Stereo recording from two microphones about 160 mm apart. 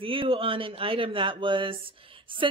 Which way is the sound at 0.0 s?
35° right (ahead or behind).